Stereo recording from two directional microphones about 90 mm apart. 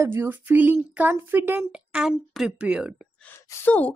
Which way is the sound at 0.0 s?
25° right (ahead or behind).